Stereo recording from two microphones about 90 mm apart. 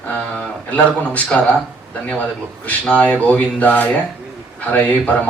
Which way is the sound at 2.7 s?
15° left (ahead or behind).